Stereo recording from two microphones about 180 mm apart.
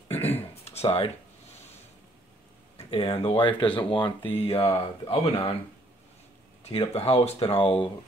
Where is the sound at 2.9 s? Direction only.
30° left (ahead or behind).